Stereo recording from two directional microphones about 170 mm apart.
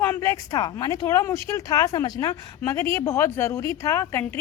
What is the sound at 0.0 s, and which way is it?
A woman's voice, 15° left (ahead or behind).